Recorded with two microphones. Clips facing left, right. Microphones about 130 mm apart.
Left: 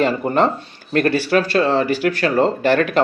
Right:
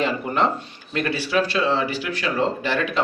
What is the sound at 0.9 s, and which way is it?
Speech, 50° left (ahead or behind).